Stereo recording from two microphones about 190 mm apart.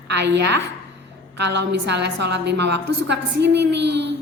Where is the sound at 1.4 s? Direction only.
65° right (ahead or behind).